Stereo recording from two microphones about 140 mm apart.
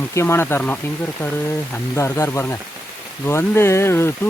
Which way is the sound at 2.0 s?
20° left (ahead or behind).